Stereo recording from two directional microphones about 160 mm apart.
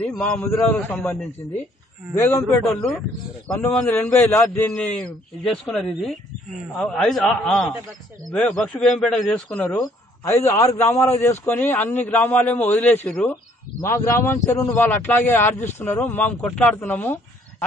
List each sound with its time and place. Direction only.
0.4 s a man's voice: 10° left (ahead or behind)
2.4 s a man's voice: centre (ahead or behind)